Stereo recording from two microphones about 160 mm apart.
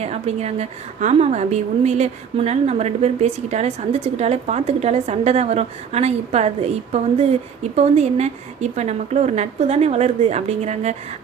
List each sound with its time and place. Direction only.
0.0 s a woman's voice: 40° right (ahead or behind)